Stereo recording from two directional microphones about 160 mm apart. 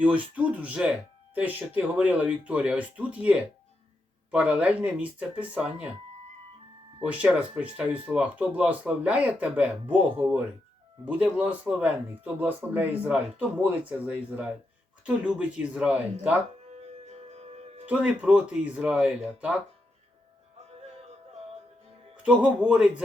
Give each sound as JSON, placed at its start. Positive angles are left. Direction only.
{"t": 0.3, "sound": "speech", "side_deg": -10}
{"t": 7.0, "sound": "speech", "side_deg": -5}
{"t": 17.1, "sound": "music", "side_deg": -40}
{"t": 17.8, "sound": "speech", "side_deg": -10}
{"t": 22.1, "sound": "speech", "side_deg": -5}